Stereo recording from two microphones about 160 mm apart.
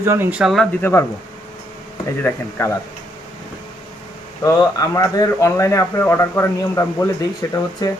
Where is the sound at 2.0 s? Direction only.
15° left (ahead or behind).